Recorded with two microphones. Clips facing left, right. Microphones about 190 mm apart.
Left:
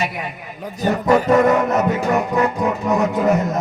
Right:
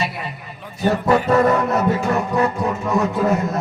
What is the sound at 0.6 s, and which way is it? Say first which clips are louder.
Speech: even; 40° left (ahead or behind).